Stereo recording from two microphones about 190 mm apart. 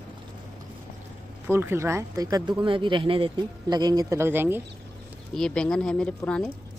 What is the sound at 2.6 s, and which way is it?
A man's voice, 25° right (ahead or behind).